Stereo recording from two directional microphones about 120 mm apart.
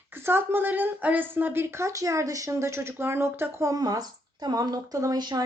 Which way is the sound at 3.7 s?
30° right (ahead or behind).